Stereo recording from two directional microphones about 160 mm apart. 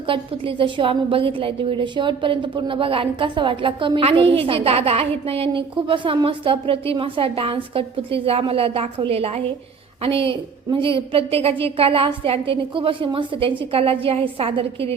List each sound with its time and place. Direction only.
0.0 s a woman's voice: 35° right (ahead or behind)